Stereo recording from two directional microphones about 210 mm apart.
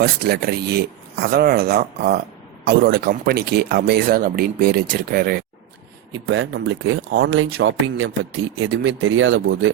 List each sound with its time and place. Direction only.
0.0 s speech: 50° right (ahead or behind)
6.1 s speech: 65° right (ahead or behind)